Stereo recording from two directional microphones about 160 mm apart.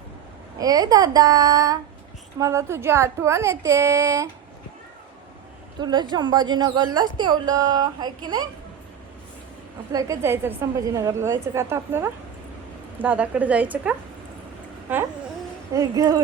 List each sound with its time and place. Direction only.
0.6 s a woman's voice: 25° right (ahead or behind)
5.8 s a woman's voice: 30° right (ahead or behind)
9.9 s a woman's voice: 20° right (ahead or behind)
15.7 s a woman's voice: 20° right (ahead or behind)